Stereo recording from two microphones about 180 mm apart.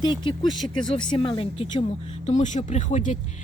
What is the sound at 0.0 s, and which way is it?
Speech, 25° left (ahead or behind).